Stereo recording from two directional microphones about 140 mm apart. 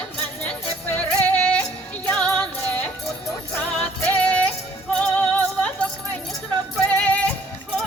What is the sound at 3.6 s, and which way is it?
Music, 10° left (ahead or behind).